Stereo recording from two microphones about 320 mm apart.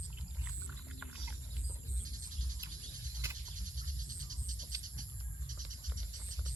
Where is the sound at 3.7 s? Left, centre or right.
Right.